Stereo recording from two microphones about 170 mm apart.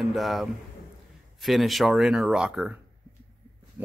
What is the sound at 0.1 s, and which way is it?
Speech, centre (ahead or behind).